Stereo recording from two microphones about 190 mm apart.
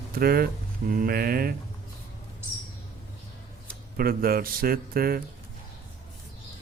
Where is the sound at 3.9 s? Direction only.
50° right (ahead or behind).